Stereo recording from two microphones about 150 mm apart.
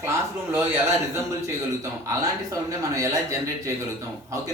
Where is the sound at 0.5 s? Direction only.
15° right (ahead or behind).